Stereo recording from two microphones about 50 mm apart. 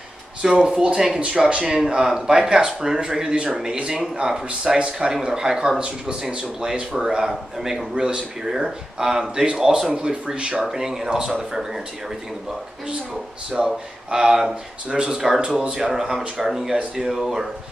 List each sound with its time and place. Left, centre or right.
0.4 s speech: centre
7.9 s speech: centre
8.5 s speech: centre
13.6 s speech: centre